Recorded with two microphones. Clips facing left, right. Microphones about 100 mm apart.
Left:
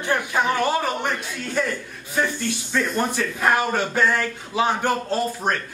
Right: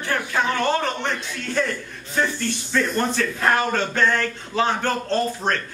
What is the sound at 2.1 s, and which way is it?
Speech, 10° left (ahead or behind).